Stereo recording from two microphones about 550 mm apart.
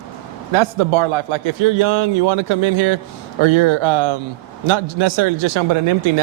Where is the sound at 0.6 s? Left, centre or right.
Right.